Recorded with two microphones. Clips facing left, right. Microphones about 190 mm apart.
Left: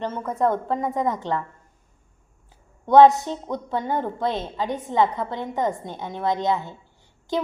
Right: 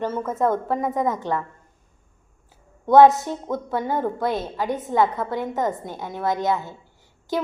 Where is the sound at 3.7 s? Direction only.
20° left (ahead or behind).